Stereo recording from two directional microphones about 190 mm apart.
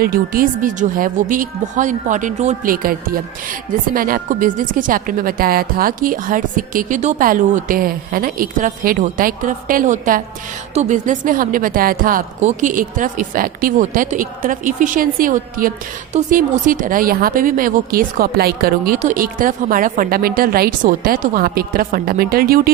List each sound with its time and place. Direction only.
0.0 s speech: 50° right (ahead or behind)